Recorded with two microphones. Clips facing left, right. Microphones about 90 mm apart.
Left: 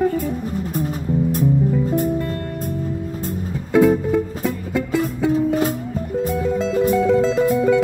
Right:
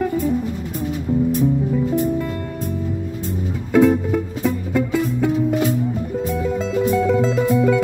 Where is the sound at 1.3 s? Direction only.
45° left (ahead or behind).